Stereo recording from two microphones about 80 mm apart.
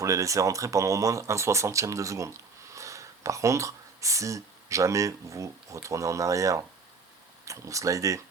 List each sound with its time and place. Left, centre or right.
0.0 s speech: right